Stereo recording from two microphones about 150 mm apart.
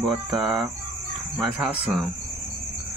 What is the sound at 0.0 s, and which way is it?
Speech, centre (ahead or behind).